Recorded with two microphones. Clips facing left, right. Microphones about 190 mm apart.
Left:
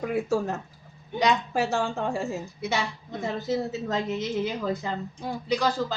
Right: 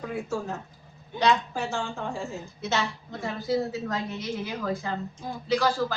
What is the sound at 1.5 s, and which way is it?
Speech, 65° left (ahead or behind).